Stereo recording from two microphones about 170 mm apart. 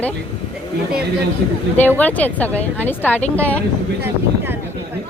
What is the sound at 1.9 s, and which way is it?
Speech, 10° left (ahead or behind).